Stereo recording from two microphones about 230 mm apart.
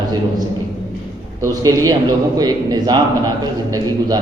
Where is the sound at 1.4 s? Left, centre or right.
Centre.